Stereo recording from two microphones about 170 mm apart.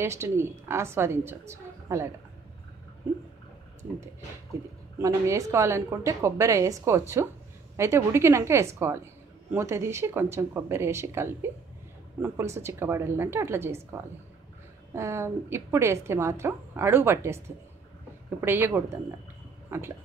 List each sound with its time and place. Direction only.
0.0 s a woman's voice: 15° right (ahead or behind)
5.0 s a woman's voice: 20° right (ahead or behind)
15.0 s a woman's voice: 15° right (ahead or behind)
18.4 s a woman's voice: 15° right (ahead or behind)